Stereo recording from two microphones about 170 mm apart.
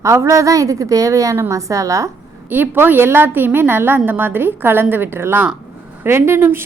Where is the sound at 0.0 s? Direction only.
15° right (ahead or behind).